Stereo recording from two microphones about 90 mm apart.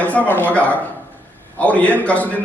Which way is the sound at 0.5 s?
15° left (ahead or behind).